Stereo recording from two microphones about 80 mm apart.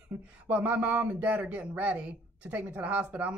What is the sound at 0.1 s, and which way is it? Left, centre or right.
Speech, centre.